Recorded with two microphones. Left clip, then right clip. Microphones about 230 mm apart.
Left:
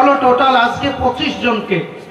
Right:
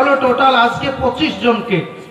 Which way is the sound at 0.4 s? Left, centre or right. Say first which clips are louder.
Even; right.